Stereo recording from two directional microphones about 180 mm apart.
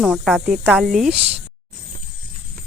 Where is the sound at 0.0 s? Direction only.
Centre (ahead or behind).